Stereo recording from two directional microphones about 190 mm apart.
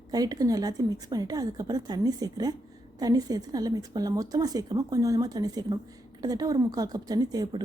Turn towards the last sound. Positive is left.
turn(degrees=-20)  # may be behind; listen again after turning